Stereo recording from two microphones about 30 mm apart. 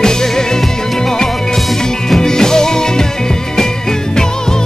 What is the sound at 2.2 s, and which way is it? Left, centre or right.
Music, centre.